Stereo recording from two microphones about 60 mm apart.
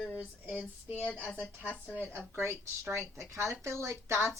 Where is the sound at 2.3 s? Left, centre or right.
Right.